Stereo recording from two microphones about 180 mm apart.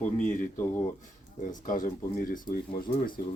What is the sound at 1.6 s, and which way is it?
Speech, 50° left (ahead or behind).